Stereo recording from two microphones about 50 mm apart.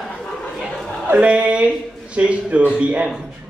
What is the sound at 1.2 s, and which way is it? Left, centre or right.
A man's voice, right.